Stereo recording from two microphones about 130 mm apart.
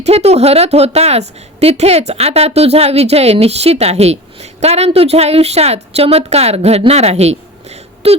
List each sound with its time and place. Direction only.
0.0 s a woman's voice: 55° right (ahead or behind)